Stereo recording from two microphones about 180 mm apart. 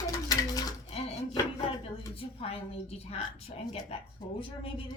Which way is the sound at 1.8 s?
30° left (ahead or behind).